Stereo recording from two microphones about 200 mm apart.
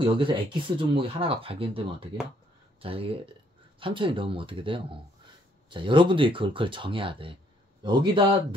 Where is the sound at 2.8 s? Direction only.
30° right (ahead or behind).